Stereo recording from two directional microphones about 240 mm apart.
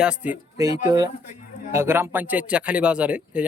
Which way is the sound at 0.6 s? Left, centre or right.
Centre.